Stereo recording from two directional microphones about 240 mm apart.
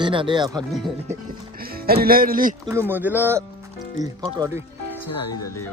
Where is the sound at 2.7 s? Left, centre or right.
Centre.